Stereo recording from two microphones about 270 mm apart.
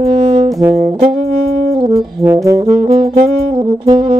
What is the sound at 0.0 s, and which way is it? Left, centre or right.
Brass instrument, right.